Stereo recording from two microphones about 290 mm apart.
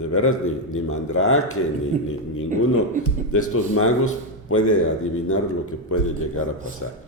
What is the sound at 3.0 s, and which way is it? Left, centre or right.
Speech, left.